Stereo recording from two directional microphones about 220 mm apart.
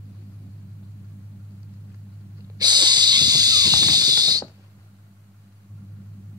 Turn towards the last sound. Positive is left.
turn(degrees=-20)  # may be behind; listen again after turning